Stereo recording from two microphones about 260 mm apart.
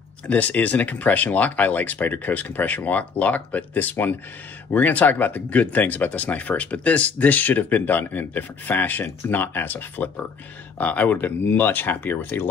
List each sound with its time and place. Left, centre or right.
0.3 s speech: centre